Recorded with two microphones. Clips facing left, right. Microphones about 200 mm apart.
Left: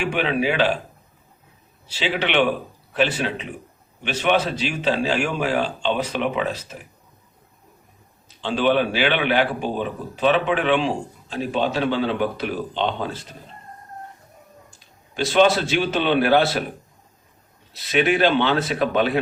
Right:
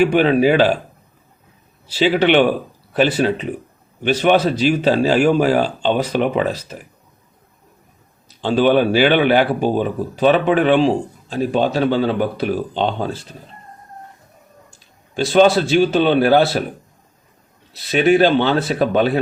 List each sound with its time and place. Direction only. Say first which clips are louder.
0.0 s speech: right 9 dB; 40° right (ahead or behind)
1.9 s speech: right 9 dB; 40° right (ahead or behind)
8.4 s speech: right 5 dB; 40° right (ahead or behind)
15.1 s speech: right 4 dB; 35° right (ahead or behind)
17.9 s speech: right 5 dB; 40° right (ahead or behind)